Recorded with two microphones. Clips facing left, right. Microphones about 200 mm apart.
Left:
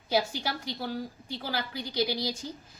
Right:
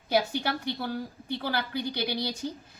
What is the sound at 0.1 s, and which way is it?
A woman's voice, 60° right (ahead or behind).